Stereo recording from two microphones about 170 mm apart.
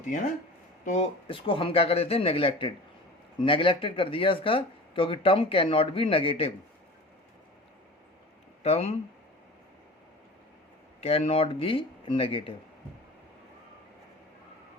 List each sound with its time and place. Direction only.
0.9 s speech: 40° left (ahead or behind)
8.6 s speech: 40° left (ahead or behind)
11.0 s speech: 35° left (ahead or behind)